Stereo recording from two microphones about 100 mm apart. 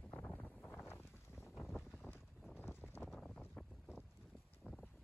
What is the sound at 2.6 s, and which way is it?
Clip-clop, 20° left (ahead or behind).